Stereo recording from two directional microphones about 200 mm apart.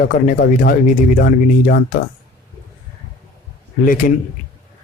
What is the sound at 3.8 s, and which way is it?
Speech, 40° left (ahead or behind).